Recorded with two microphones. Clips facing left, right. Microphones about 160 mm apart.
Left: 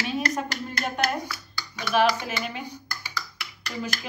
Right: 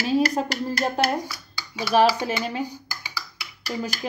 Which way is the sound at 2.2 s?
35° right (ahead or behind).